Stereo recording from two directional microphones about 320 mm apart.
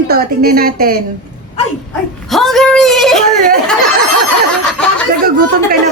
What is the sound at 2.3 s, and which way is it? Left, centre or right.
Speech, centre.